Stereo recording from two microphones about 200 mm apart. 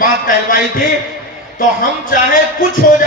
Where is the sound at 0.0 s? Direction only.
45° left (ahead or behind).